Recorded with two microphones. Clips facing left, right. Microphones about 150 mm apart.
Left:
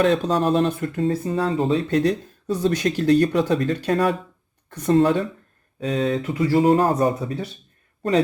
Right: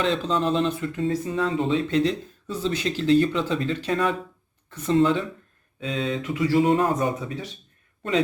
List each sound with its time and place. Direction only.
0.0 s speech: 45° left (ahead or behind)
2.6 s speech: 50° left (ahead or behind)